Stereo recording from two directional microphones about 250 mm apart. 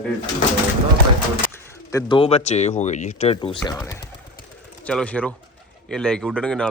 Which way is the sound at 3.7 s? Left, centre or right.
Centre.